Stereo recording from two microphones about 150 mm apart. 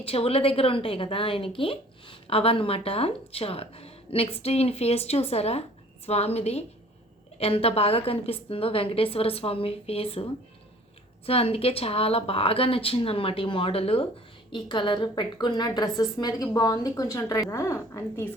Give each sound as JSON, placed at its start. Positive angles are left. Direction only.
{"t": 0.0, "sound": "a woman's voice", "side_deg": 40}
{"t": 11.3, "sound": "a woman's voice", "side_deg": 40}